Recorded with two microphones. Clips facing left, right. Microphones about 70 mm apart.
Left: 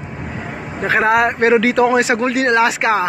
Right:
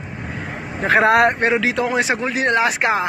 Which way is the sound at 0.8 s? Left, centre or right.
Right.